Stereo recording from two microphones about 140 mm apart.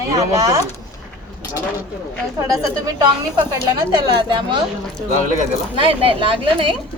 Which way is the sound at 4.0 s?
35° right (ahead or behind).